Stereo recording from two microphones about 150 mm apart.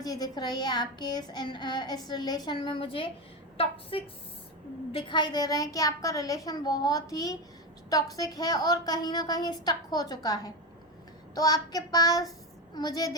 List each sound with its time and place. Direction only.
0.0 s a child's voice: 25° left (ahead or behind)